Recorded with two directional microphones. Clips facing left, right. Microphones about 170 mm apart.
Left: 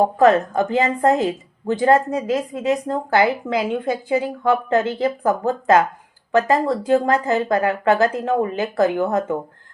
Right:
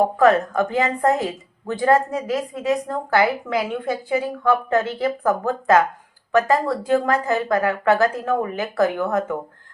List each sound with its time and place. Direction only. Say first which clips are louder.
0.0 s a woman's voice: left 1 dB; 25° left (ahead or behind)